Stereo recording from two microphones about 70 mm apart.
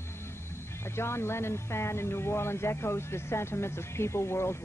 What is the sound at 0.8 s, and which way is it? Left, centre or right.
Speech, left.